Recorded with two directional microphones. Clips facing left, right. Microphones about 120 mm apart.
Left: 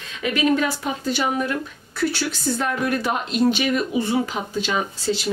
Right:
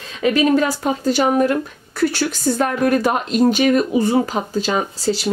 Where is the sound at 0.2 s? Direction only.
40° right (ahead or behind).